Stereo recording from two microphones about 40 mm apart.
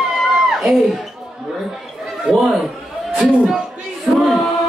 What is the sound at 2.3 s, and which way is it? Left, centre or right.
Speech, centre.